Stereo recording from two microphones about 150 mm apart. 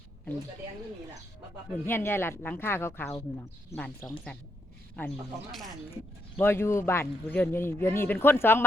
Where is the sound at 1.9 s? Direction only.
15° left (ahead or behind).